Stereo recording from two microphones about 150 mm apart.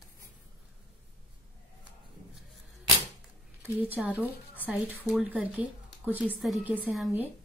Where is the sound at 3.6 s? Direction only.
10° right (ahead or behind).